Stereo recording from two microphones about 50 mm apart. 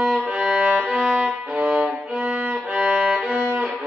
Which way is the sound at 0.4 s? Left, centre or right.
Centre.